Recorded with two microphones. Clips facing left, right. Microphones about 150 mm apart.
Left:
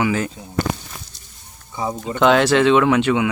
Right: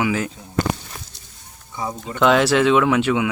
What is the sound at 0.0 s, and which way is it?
Speech, 5° right (ahead or behind).